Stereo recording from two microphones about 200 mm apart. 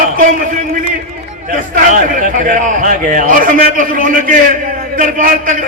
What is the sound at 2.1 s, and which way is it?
A man's voice, 40° right (ahead or behind).